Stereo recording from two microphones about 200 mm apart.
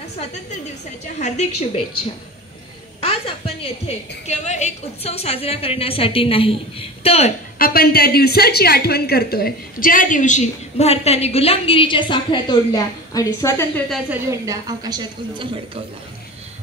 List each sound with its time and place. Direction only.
1.2 s a woman's voice: 35° left (ahead or behind)
3.0 s a woman's voice: 30° left (ahead or behind)
7.5 s a woman's voice: 45° left (ahead or behind); by 13.8 s 15° left (ahead or behind)
14.3 s a woman's voice: 15° right (ahead or behind)